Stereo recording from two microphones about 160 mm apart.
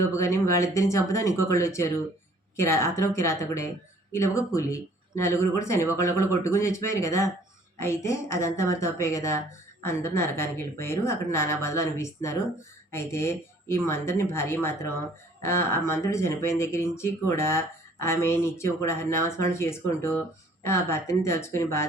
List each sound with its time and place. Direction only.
0.1 s speech: 20° left (ahead or behind)